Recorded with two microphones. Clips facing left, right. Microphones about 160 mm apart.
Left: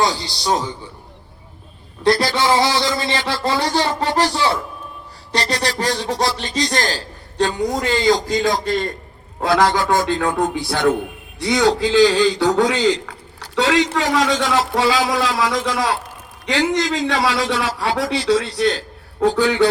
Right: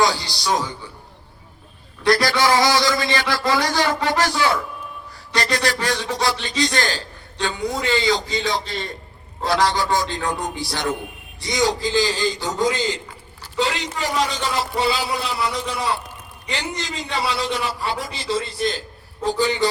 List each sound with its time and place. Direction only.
0.0 s a man's voice: 20° left (ahead or behind)
2.0 s a man's voice: 25° left (ahead or behind); by 19.6 s 65° left (ahead or behind)